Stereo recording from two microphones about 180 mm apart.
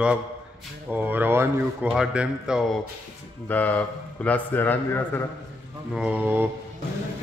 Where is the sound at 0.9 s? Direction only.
10° right (ahead or behind).